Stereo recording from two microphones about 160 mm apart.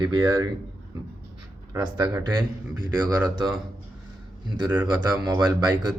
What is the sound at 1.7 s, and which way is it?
Speech, 25° right (ahead or behind).